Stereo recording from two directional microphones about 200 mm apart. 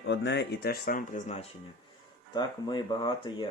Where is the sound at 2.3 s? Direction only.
20° left (ahead or behind).